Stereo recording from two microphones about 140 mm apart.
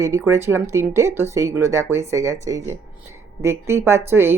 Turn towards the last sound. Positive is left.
turn(degrees=-15)  # may be behind; listen again after turning